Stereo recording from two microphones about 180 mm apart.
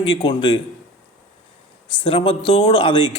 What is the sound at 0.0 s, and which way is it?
Speech, 30° left (ahead or behind).